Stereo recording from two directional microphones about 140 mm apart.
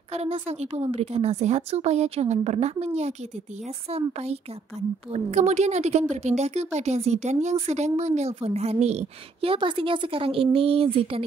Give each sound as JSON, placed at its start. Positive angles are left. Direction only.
{"t": 0.1, "sound": "a woman's voice", "side_deg": -45}